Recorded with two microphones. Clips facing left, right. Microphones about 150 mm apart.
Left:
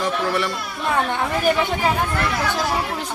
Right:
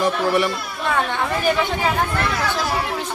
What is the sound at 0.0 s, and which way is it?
Speech, 10° right (ahead or behind).